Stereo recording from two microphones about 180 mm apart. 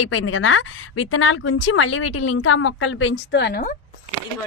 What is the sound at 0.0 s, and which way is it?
A woman's voice, 90° left.